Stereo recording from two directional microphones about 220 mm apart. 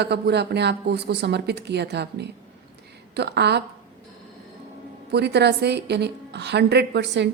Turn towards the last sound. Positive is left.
turn(degrees=-50)  # may be behind; listen again after turning